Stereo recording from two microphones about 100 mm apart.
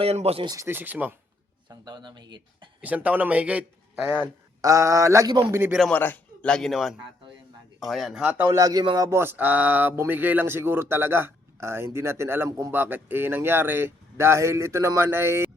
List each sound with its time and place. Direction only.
0.0 s speech: 90° right
0.4 s speech: 35° right (ahead or behind)
0.7 s a man's voice: 20° right (ahead or behind)
1.7 s speech: 45° right (ahead or behind)
2.8 s a man's voice: 15° right (ahead or behind)
4.6 s speech: 30° right (ahead or behind)
5.5 s speech: 20° right (ahead or behind)
5.9 s a man's voice: 20° left (ahead or behind)
6.5 s a man's voice: centre (ahead or behind)
8.2 s a man's voice: 15° right (ahead or behind)
8.5 s speech: 40° right (ahead or behind)
9.0 s speech: 25° right (ahead or behind)
12.5 s speech: 35° right (ahead or behind)
12.7 s speech: 20° right (ahead or behind)